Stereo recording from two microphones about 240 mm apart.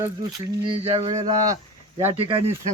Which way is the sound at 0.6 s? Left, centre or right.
Right.